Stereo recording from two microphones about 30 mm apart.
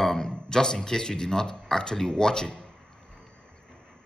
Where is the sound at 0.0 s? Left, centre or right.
Centre.